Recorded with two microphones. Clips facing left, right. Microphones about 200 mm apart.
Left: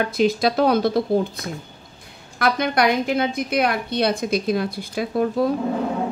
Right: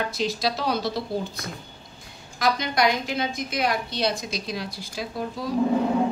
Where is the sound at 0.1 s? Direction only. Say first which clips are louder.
Left 7 dB; 55° left (ahead or behind).